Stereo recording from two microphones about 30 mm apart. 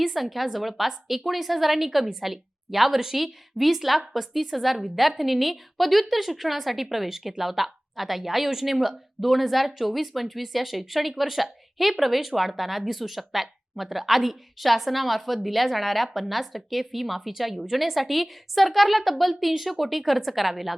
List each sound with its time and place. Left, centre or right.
0.0 s a woman's voice: centre